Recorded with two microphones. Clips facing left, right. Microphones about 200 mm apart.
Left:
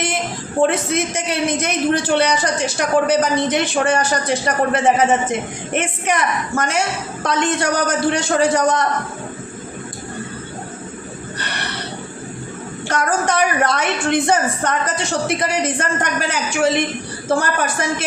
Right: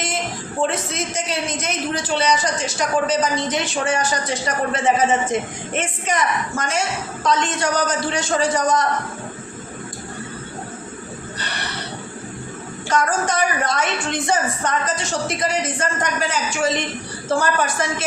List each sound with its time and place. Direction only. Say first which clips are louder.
0.6 s a man's voice: left 6 dB; 60° left (ahead or behind)
12.9 s a man's voice: left 1 dB; 60° left (ahead or behind)